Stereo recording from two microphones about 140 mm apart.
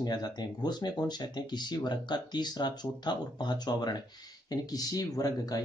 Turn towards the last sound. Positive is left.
turn(degrees=25)  # may be behind; listen again after turning